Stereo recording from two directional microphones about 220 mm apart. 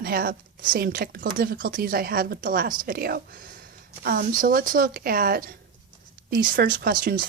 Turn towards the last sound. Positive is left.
turn(degrees=-40)  # may be behind; listen again after turning